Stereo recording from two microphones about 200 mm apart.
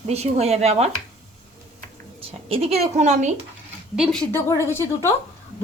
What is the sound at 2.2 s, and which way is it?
A woman's voice, 30° right (ahead or behind).